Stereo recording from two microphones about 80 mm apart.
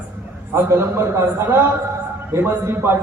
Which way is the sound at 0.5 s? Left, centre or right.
Right.